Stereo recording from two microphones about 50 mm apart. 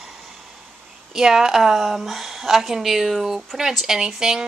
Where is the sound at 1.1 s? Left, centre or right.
Centre.